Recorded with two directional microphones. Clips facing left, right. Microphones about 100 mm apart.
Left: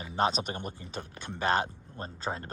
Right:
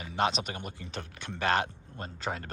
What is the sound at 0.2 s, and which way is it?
Speech, 40° left (ahead or behind).